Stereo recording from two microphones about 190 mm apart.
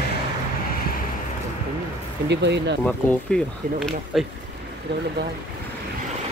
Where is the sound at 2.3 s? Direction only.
65° right (ahead or behind).